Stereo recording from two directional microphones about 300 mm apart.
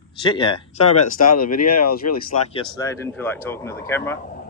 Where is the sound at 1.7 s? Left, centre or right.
Left.